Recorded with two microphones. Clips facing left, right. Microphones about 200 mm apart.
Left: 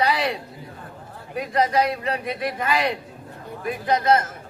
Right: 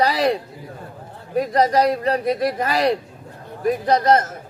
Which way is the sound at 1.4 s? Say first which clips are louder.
Right 4 dB; 40° right (ahead or behind).